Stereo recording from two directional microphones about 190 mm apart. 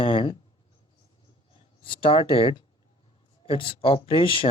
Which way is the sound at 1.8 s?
25° left (ahead or behind).